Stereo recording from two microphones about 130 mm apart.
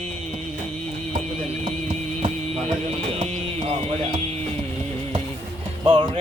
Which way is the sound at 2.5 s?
55° right (ahead or behind).